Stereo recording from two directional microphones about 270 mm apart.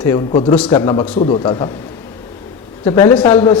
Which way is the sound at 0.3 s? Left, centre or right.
Left.